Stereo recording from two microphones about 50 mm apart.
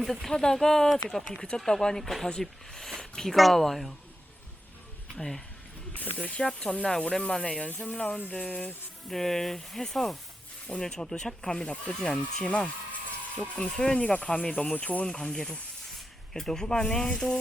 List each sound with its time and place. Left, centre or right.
0.0 s speech: centre
5.1 s speech: centre
6.9 s speech: centre
8.3 s speech: left
9.0 s speech: centre
14.7 s speech: left
15.0 s speech: centre